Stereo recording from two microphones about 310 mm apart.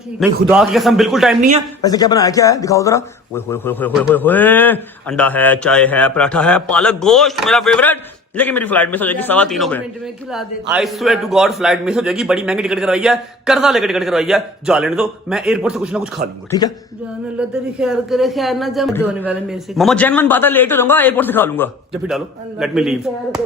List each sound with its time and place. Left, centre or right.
0.2 s speech: centre
1.4 s speech: right
1.8 s speech: centre
16.5 s speech: centre
17.7 s speech: centre